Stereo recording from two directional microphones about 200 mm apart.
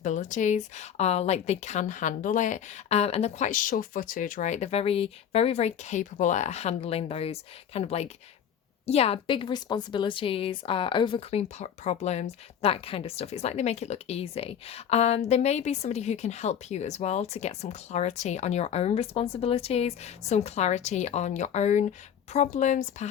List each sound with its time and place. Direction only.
0.0 s a woman's voice: 40° left (ahead or behind)